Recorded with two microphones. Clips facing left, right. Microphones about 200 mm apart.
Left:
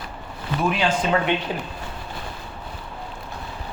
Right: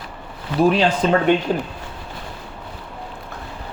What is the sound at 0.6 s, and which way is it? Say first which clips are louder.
Speech: right 7 dB; 35° right (ahead or behind).